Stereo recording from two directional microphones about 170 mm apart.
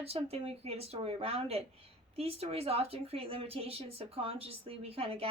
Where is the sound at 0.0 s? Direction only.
35° right (ahead or behind).